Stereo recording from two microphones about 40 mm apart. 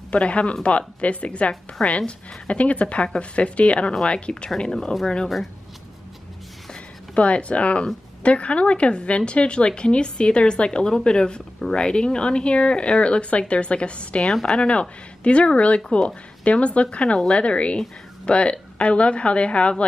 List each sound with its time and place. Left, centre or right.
0.1 s speech: left
7.2 s speech: left
14.2 s a woman's voice: centre
14.6 s speech: left